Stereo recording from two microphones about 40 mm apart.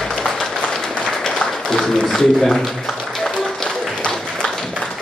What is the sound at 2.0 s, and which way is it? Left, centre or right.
Speech, centre.